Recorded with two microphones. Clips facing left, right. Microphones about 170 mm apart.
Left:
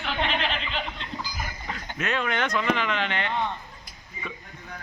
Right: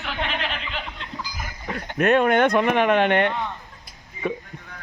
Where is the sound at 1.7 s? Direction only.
60° right (ahead or behind).